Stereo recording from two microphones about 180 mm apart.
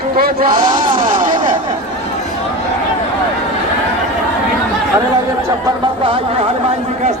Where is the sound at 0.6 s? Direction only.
25° right (ahead or behind).